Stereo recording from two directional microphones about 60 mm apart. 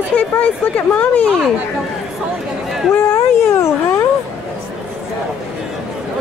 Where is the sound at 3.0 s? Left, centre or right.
Left.